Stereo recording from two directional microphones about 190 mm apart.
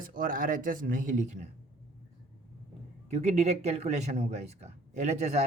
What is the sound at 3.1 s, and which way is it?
Speech, 35° right (ahead or behind).